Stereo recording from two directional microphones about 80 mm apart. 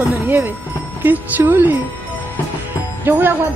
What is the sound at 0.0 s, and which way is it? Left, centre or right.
A woman's voice, right.